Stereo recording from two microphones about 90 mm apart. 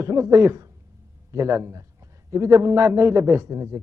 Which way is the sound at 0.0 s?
35° right (ahead or behind).